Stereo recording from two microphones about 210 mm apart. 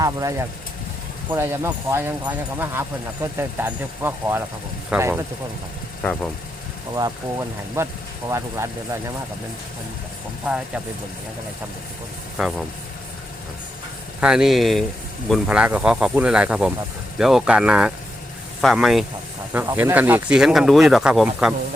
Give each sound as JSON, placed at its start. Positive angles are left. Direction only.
{"t": 0.0, "sound": "speech", "side_deg": -15}
{"t": 3.3, "sound": "speech", "side_deg": -10}
{"t": 6.0, "sound": "speech", "side_deg": 10}
{"t": 6.9, "sound": "speech", "side_deg": -15}
{"t": 12.4, "sound": "speech", "side_deg": 0}
{"t": 14.2, "sound": "speech", "side_deg": -5}